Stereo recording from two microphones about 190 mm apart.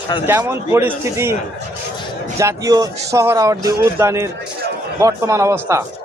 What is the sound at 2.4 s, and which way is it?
A man's voice, 15° right (ahead or behind).